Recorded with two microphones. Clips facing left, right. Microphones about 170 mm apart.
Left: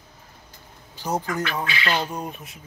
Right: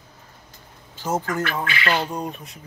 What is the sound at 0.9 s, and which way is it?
Speech, 15° left (ahead or behind).